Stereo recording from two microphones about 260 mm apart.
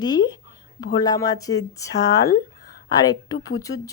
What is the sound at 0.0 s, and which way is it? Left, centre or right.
Speech, centre.